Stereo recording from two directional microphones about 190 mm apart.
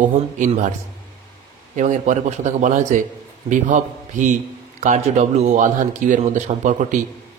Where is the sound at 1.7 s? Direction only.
40° right (ahead or behind).